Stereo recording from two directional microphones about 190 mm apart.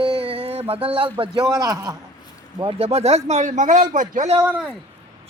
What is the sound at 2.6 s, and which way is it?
A man's voice, 30° right (ahead or behind).